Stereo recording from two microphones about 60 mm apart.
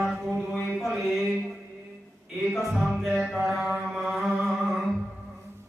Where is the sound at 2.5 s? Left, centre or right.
Centre.